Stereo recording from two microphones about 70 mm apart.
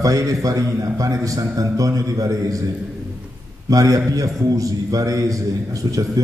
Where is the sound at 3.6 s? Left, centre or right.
Right.